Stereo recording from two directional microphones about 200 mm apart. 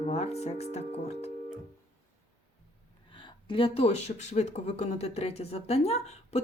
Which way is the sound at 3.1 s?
25° left (ahead or behind).